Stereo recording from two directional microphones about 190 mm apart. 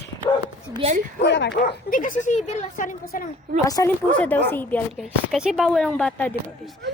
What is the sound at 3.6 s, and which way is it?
Speech, 20° left (ahead or behind).